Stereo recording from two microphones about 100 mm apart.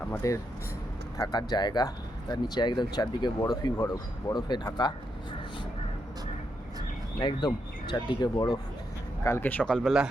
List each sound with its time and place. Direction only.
0.2 s speech: 35° left (ahead or behind)
1.2 s speech: 45° left (ahead or behind)
7.2 s speech: 50° left (ahead or behind)
9.4 s speech: 15° left (ahead or behind)